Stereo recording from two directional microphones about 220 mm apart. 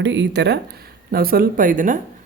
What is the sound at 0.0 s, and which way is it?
Speech, 55° right (ahead or behind).